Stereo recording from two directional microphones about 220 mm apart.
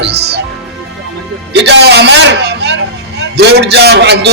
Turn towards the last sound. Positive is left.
turn(degrees=-50)  # may be behind; listen again after turning